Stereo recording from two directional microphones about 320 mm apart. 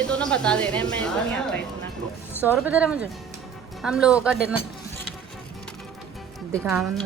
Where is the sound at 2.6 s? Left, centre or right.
Centre.